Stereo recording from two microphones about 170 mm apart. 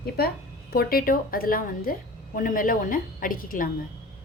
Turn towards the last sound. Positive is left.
turn(degrees=55)  # may be behind; listen again after turning